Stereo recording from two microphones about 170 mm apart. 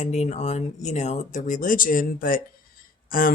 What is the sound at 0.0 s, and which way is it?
Speech, 45° left (ahead or behind).